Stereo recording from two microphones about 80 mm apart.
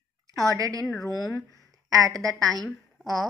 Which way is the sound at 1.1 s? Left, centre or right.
Left.